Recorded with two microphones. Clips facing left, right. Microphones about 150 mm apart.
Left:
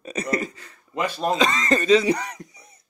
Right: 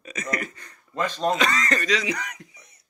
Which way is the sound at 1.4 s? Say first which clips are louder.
Left 4 dB; 25° left (ahead or behind).